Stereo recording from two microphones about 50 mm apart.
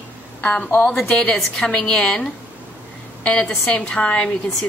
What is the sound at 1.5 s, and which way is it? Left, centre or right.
A woman's voice, centre.